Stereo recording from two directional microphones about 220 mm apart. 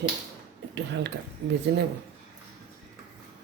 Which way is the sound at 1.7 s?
50° right (ahead or behind).